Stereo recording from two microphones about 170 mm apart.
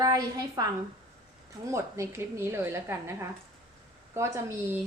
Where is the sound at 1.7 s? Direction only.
15° right (ahead or behind).